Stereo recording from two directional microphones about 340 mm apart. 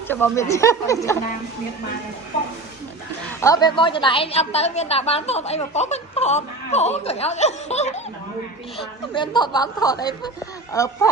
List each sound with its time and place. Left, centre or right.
0.1 s speech: centre
3.4 s a woman's voice: centre
9.1 s speech: centre